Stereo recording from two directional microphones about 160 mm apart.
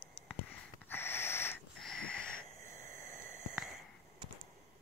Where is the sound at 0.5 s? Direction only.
15° left (ahead or behind).